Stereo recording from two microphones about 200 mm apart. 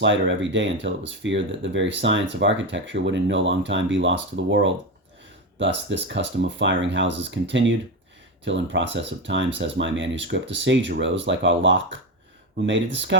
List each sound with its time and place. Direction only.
0.0 s speech: 65° right (ahead or behind)